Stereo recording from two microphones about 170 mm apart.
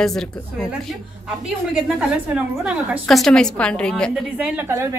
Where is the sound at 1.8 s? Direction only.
5° right (ahead or behind).